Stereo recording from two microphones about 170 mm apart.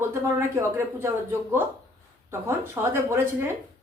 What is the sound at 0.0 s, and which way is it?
A woman's voice, 15° right (ahead or behind).